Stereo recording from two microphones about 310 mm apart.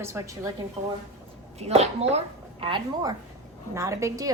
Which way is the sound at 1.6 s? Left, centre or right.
Centre.